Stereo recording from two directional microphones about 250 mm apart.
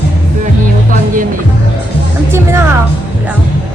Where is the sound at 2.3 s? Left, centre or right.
Centre.